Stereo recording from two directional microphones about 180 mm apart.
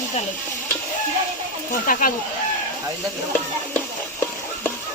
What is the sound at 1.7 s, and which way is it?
Speech, 50° left (ahead or behind).